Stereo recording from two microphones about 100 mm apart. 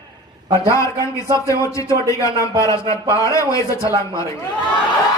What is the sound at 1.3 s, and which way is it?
A man's voice, 30° left (ahead or behind).